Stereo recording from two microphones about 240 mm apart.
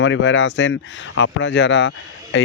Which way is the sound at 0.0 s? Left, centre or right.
Left.